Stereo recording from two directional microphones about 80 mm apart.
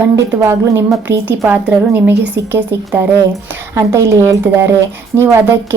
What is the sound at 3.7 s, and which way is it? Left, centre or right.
A woman's voice, right.